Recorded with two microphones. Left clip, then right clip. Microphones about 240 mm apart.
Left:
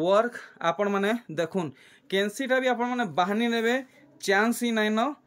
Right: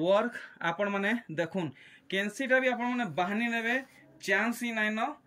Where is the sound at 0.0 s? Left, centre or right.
Centre.